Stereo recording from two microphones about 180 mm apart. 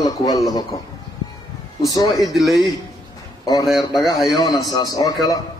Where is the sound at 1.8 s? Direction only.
20° left (ahead or behind).